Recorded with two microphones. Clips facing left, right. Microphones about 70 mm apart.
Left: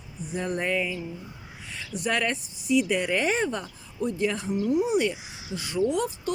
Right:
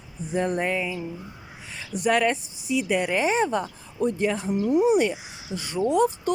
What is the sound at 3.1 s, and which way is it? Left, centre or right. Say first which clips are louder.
Speech: right 4 dB; centre.